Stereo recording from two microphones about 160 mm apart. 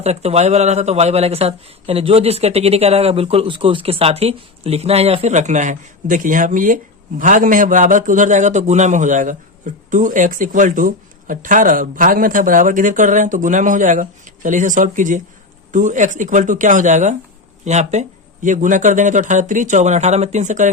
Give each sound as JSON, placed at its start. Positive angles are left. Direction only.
{"t": 0.0, "sound": "a man's voice", "side_deg": -40}